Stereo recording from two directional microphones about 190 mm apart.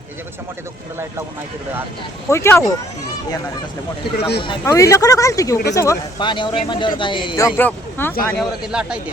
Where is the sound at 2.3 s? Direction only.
15° left (ahead or behind).